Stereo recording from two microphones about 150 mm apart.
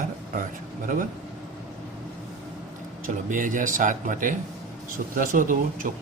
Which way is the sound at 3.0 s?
65° right (ahead or behind).